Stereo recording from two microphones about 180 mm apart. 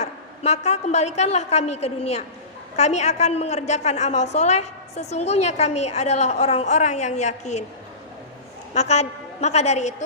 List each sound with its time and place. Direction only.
0.0 s a woman's voice: 40° left (ahead or behind)
8.7 s a woman's voice: 40° left (ahead or behind)